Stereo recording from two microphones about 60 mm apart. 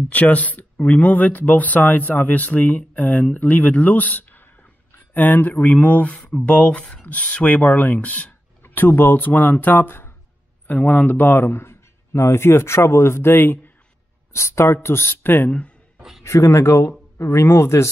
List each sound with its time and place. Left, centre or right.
0.1 s speech: left
10.7 s a man's voice: left
14.3 s a man's voice: left
16.0 s a sound: centre
16.3 s a man's voice: left